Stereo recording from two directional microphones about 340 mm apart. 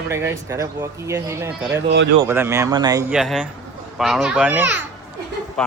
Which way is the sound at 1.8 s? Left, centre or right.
Right.